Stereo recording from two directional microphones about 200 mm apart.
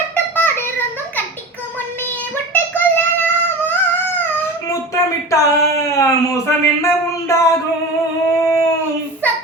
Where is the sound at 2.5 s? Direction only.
10° left (ahead or behind).